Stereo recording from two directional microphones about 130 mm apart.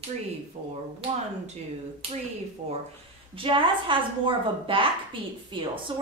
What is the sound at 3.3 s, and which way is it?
A woman's voice, 40° right (ahead or behind).